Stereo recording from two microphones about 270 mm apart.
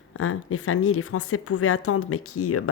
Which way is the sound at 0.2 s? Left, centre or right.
Left.